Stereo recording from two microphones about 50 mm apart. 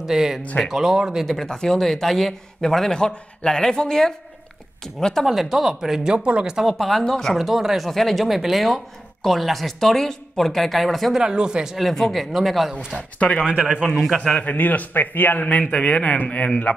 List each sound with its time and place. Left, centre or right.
0.0 s speech: centre
1.2 s a man's voice: centre
5.2 s speech: centre
7.3 s speech: centre
11.1 s speech: centre
11.9 s speech: centre
12.9 s speech: left
13.6 s a man's voice: right
14.1 s a man's voice: centre
14.4 s a man's voice: left
15.6 s speech: left